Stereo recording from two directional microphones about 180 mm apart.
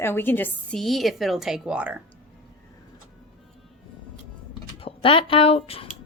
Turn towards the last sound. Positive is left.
turn(degrees=30)  # may be behind; listen again after turning